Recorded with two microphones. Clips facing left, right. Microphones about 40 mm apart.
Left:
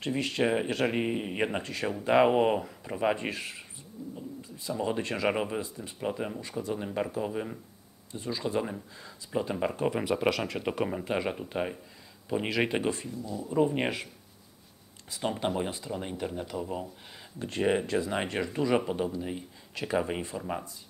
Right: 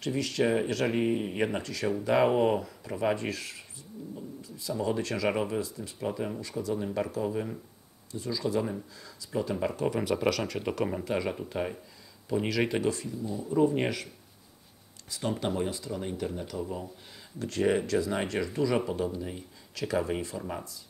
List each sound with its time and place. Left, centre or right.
0.0 s speech: left
8.1 s speech: left
15.0 s speech: left